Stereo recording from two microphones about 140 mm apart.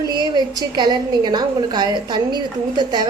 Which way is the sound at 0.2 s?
30° right (ahead or behind).